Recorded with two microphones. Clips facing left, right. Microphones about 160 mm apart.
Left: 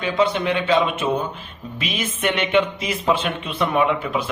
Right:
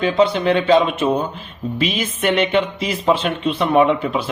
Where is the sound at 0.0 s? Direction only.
35° right (ahead or behind).